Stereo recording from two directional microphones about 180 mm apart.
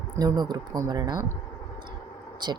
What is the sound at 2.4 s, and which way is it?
Speech, 25° right (ahead or behind).